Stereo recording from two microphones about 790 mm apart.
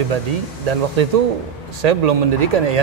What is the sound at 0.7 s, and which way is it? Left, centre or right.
A man's voice, right.